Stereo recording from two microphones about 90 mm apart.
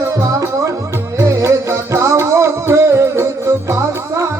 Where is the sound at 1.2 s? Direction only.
35° right (ahead or behind).